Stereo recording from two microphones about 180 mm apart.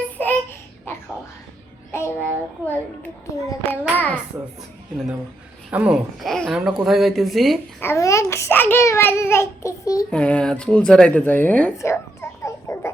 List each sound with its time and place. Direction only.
0.2 s a sound: 10° left (ahead or behind)
1.9 s a child's voice: 15° left (ahead or behind)
5.7 s speech: 5° right (ahead or behind)
7.8 s a child's voice: 15° left (ahead or behind)
10.1 s speech: 5° left (ahead or behind)